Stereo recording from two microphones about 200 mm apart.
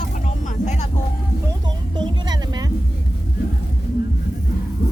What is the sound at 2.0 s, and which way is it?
Music, 20° right (ahead or behind).